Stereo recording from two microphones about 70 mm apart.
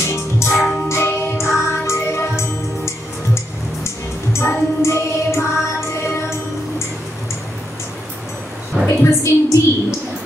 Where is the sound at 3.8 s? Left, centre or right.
Left.